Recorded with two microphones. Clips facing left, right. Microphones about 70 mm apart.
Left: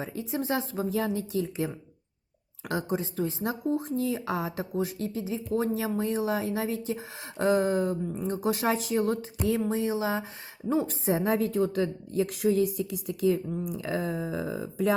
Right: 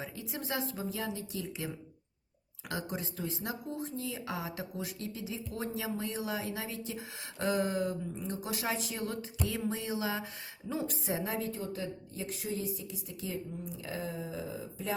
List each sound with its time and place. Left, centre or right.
0.0 s speech: left
0.8 s speech: left
3.8 s speech: left
9.6 s speech: left
11.3 s a woman's voice: left